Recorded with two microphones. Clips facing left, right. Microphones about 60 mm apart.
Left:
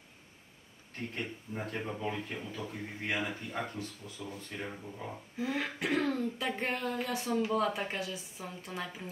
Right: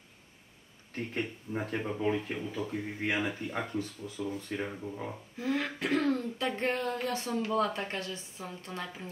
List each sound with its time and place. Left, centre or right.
0.9 s speech: right
5.4 s throat clearing: centre